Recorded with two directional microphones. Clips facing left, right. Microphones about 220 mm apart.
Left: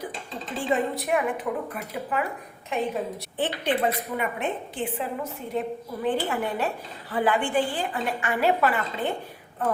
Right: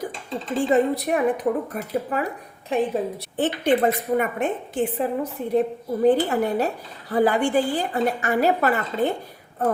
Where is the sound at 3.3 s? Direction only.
45° right (ahead or behind).